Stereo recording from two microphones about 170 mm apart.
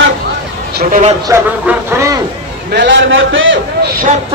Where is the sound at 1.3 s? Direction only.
15° right (ahead or behind).